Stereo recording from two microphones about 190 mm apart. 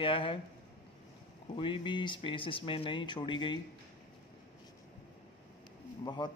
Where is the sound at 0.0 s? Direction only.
25° left (ahead or behind).